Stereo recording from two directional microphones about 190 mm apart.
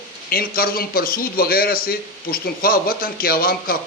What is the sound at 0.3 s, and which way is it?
A man's voice, 50° left (ahead or behind).